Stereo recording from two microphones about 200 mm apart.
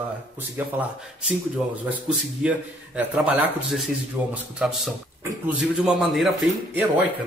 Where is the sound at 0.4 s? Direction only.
10° right (ahead or behind).